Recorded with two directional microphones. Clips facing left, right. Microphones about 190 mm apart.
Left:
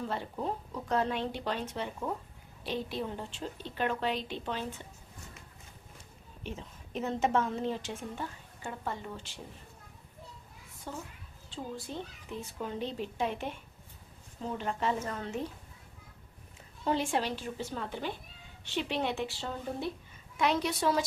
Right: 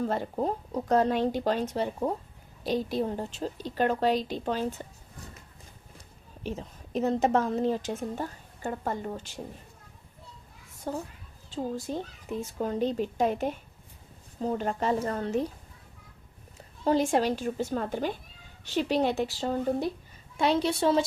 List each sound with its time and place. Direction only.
0.0 s speech: 45° right (ahead or behind)
6.4 s speech: 40° right (ahead or behind)
10.9 s speech: 45° right (ahead or behind)
16.8 s a woman's voice: 40° right (ahead or behind)